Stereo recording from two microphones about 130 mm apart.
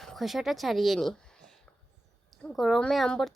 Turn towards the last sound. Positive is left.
turn(degrees=0)  # may be behind; listen again after turning